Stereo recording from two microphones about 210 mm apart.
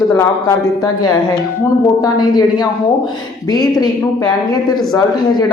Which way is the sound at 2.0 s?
20° left (ahead or behind).